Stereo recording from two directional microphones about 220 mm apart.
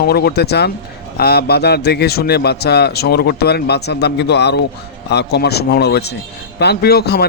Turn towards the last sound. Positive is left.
turn(degrees=45)  # may be behind; listen again after turning